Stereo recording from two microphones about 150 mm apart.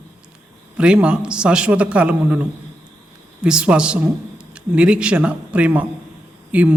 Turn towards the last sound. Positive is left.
turn(degrees=-10)  # may be behind; listen again after turning